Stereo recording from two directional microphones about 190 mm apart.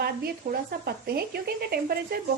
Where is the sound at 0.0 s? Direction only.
55° right (ahead or behind).